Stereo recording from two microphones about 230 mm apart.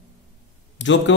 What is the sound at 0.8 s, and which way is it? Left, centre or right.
Speech, left.